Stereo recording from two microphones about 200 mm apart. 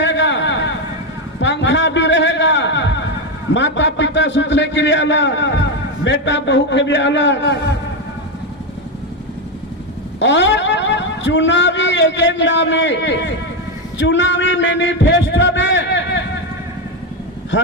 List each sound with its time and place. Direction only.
0.0 s a sound: 65° left (ahead or behind)
3.5 s a man's voice: 60° left (ahead or behind)
10.2 s a man's voice: 65° left (ahead or behind)